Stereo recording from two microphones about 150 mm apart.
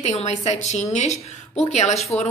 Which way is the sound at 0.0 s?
50° left (ahead or behind).